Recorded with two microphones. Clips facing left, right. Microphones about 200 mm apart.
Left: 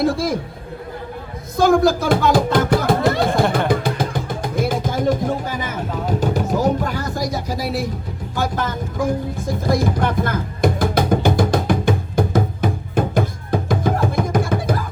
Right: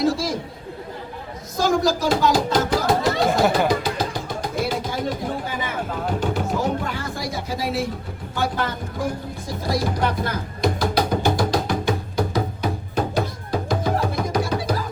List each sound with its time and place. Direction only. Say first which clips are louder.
0.0 s a man's voice: left 3 dB; 55° left (ahead or behind)
1.5 s music: left 5 dB; 55° left (ahead or behind)
3.7 s a sound: left 3 dB; 55° left (ahead or behind)
8.4 s vehicle: left 2 dB; 45° left (ahead or behind)
9.5 s music: left 4 dB; 50° left (ahead or behind)